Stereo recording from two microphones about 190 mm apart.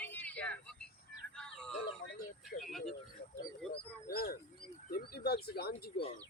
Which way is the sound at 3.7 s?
55° left (ahead or behind).